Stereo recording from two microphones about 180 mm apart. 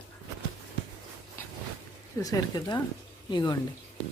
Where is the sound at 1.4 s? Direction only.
15° left (ahead or behind).